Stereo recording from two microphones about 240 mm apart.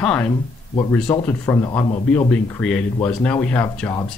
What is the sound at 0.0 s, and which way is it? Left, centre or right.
A man's voice, centre.